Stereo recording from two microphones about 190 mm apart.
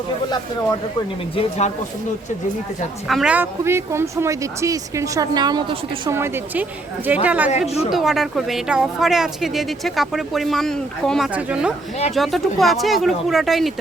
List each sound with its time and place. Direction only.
1.4 s speech: 35° left (ahead or behind)
3.1 s a woman's voice: 5° right (ahead or behind)